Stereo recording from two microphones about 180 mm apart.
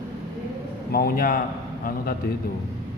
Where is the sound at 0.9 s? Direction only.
55° left (ahead or behind).